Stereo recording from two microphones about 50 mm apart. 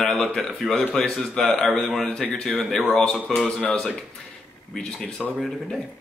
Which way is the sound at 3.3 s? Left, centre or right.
Centre.